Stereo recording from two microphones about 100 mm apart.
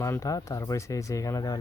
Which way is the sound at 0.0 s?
30° left (ahead or behind).